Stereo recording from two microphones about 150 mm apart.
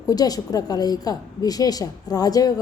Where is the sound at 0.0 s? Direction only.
25° left (ahead or behind).